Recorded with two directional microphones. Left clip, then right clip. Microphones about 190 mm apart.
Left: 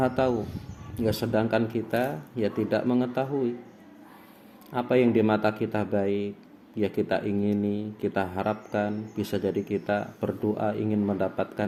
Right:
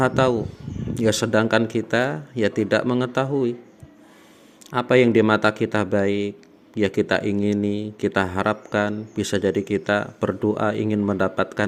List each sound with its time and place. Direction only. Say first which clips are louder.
0.0 s speech: right 6 dB; 40° right (ahead or behind)
4.7 s speech: right 6 dB; 40° right (ahead or behind)